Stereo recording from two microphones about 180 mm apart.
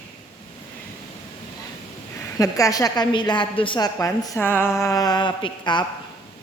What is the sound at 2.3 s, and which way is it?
A woman's voice, 20° left (ahead or behind).